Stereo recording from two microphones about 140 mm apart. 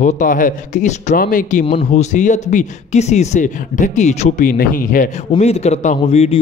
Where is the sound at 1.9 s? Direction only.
60° left (ahead or behind); by 5.1 s 85° left.